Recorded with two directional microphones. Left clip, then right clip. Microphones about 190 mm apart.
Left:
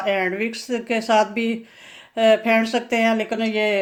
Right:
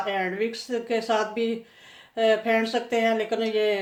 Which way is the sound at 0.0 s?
45° left (ahead or behind).